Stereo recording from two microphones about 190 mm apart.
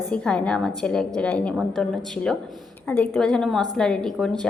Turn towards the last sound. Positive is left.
turn(degrees=5)  # may be behind; listen again after turning